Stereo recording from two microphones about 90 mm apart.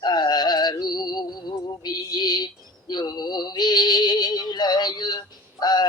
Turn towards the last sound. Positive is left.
turn(degrees=50)  # may be behind; listen again after turning